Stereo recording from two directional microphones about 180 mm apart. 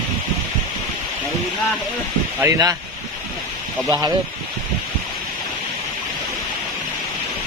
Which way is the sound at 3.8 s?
15° right (ahead or behind).